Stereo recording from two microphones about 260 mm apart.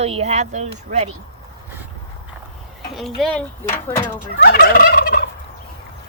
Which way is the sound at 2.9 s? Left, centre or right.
Centre.